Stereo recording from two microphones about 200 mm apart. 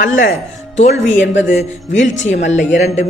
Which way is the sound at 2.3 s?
35° left (ahead or behind).